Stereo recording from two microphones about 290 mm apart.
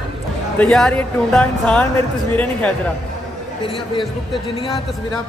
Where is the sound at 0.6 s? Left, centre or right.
Centre.